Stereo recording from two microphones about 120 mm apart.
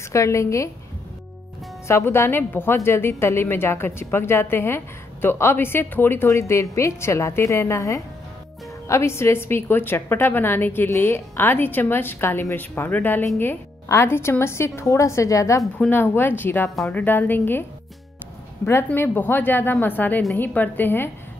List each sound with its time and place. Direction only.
0.1 s a woman's voice: 25° left (ahead or behind)
1.9 s a woman's voice: 20° left (ahead or behind)
15.9 s a woman's voice: 15° left (ahead or behind)
18.7 s a woman's voice: 20° left (ahead or behind)